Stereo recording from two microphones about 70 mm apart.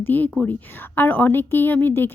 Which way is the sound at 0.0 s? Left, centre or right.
Left.